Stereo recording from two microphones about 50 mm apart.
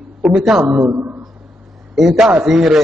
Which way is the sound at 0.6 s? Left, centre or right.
Right.